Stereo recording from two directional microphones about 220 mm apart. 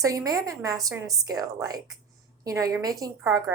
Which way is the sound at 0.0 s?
15° right (ahead or behind).